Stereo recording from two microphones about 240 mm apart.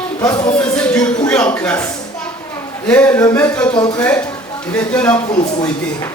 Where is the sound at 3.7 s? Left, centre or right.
Centre.